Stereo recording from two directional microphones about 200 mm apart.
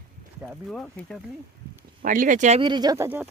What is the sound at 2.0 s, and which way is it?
Speech, 40° right (ahead or behind).